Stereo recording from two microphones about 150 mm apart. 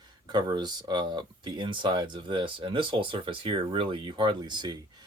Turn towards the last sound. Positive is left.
turn(degrees=-30)  # may be behind; listen again after turning